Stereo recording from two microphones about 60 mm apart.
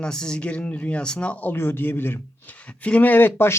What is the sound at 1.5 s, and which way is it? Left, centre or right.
Speech, left.